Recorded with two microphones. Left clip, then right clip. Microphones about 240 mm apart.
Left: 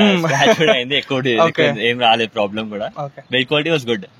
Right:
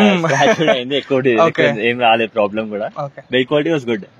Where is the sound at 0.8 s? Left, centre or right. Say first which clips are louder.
Right 2 dB; left.